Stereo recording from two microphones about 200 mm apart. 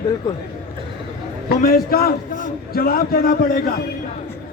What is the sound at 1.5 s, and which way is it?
A man's voice, 50° left (ahead or behind).